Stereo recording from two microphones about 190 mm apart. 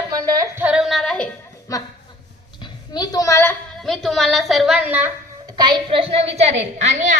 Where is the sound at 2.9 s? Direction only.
20° left (ahead or behind); by 5.1 s 10° right (ahead or behind).